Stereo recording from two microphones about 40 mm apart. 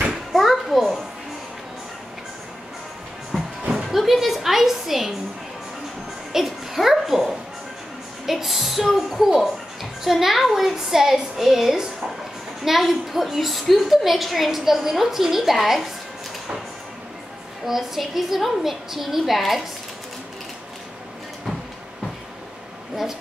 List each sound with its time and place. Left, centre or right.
0.1 s children playing: centre
3.7 s music: centre
6.3 s a sound: centre
8.3 s a woman's voice: centre
17.6 s a woman's voice: centre